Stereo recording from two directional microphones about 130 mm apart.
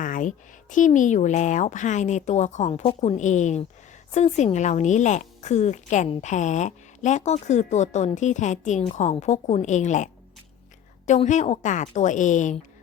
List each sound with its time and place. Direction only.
0.0 s a woman's voice: 85° left